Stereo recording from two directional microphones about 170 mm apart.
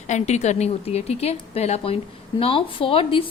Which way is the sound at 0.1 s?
40° left (ahead or behind).